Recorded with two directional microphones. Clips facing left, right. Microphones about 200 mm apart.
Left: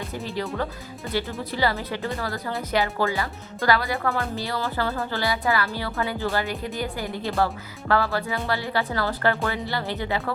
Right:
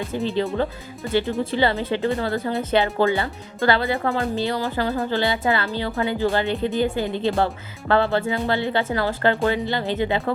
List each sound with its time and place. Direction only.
0.1 s speech: 25° right (ahead or behind)